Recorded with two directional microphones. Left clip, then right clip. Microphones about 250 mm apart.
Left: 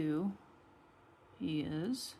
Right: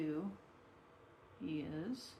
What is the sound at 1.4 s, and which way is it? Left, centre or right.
Speech, left.